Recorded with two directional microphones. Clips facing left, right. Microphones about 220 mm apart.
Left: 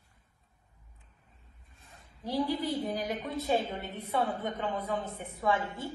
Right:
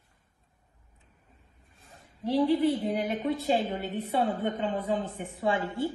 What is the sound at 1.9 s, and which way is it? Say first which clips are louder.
A woman's voice: right 6 dB; 25° right (ahead or behind).